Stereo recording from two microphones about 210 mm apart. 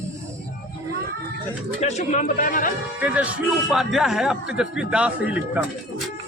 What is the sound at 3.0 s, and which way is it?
A man's voice, 5° right (ahead or behind).